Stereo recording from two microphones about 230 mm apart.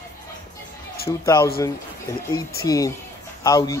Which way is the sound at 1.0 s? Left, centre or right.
Centre.